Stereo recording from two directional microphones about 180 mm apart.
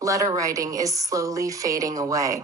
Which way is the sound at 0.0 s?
20° right (ahead or behind).